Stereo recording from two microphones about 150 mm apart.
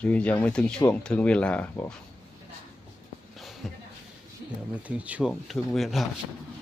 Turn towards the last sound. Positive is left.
turn(degrees=0)  # may be behind; listen again after turning